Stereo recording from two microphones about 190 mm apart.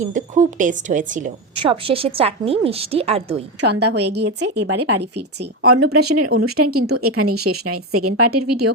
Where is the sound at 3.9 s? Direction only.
65° right (ahead or behind).